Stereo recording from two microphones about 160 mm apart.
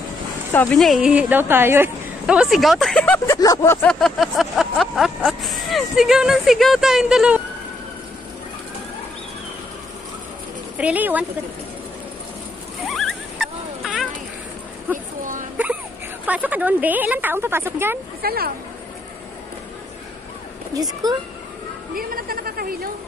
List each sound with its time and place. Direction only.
0.7 s speech: centre (ahead or behind)
3.3 s speech: 20° left (ahead or behind); by 7.4 s 5° right (ahead or behind)
10.8 s speech: 10° right (ahead or behind)
12.8 s rodents: centre (ahead or behind)
14.9 s a sound: 10° right (ahead or behind)
16.3 s speech: 10° right (ahead or behind)
18.2 s speech: 70° right (ahead or behind)
20.7 s speech: 25° right (ahead or behind)
21.9 s a sound: 65° right (ahead or behind)